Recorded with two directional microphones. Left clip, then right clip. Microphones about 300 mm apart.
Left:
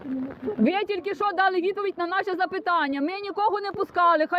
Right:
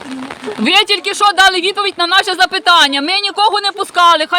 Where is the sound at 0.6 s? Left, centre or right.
Centre.